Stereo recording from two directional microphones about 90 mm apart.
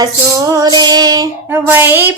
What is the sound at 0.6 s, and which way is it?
Music, 50° right (ahead or behind).